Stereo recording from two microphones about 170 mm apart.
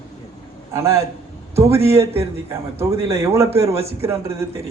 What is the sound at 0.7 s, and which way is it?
A man's voice, 15° right (ahead or behind).